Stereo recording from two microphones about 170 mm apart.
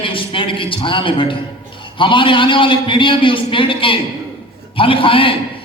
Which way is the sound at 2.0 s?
30° left (ahead or behind).